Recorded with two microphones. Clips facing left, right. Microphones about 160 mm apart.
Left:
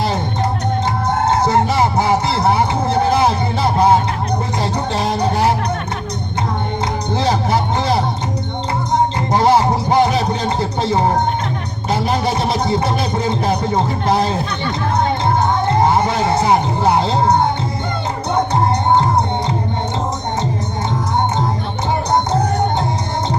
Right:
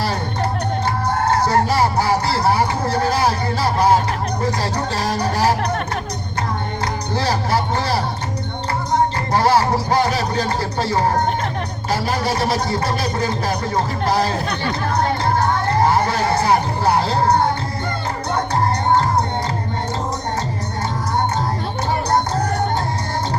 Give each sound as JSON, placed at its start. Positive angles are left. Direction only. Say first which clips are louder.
{"t": 1.2, "sound": "fowl", "louder": "left 2 dB", "side_deg": 25}
{"t": 4.6, "sound": "music", "louder": "left 3 dB", "side_deg": 25}
{"t": 7.1, "sound": "music", "louder": "left 3 dB", "side_deg": 20}
{"t": 9.3, "sound": "a sound", "louder": "left 3 dB", "side_deg": 20}
{"t": 15.6, "sound": "emergency vehicle", "louder": "left 2 dB", "side_deg": 25}